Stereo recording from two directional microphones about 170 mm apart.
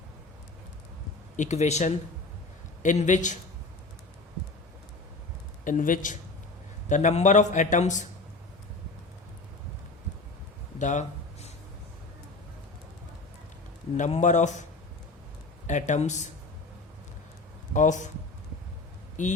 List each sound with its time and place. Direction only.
1.4 s a man's voice: 40° left (ahead or behind)
5.6 s a man's voice: 50° left (ahead or behind)
10.8 s speech: 45° left (ahead or behind)
13.9 s a man's voice: 45° left (ahead or behind)
15.6 s a man's voice: 45° left (ahead or behind)
17.7 s a man's voice: 45° left (ahead or behind)
19.2 s a man's voice: 45° left (ahead or behind)